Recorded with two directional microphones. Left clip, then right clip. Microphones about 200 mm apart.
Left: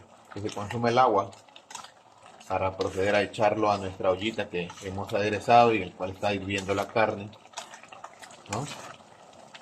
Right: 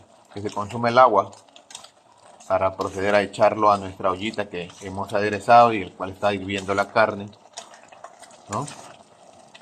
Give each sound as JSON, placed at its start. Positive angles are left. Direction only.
{"t": 0.4, "sound": "speech", "side_deg": -20}
{"t": 2.5, "sound": "speech", "side_deg": -20}